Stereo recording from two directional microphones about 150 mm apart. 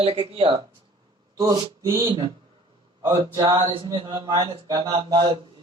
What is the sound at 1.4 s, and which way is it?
Speech, 25° right (ahead or behind).